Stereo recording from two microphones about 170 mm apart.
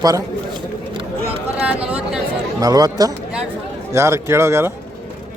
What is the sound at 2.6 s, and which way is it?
A man's voice, 20° right (ahead or behind).